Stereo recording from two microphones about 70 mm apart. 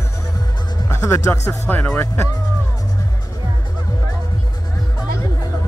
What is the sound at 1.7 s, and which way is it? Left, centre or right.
Speech, left.